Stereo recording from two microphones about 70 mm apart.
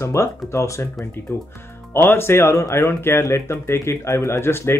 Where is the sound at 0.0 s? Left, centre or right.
Left.